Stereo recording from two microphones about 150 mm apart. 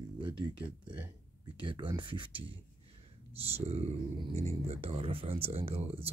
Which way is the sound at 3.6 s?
45° right (ahead or behind).